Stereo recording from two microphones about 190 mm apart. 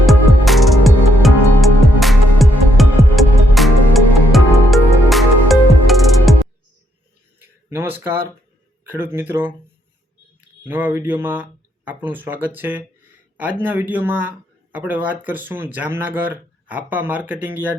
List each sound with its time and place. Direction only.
0.0 s music: centre (ahead or behind)
7.4 s a sound: 10° right (ahead or behind)
8.9 s speech: 10° right (ahead or behind)
10.6 s speech: 10° right (ahead or behind)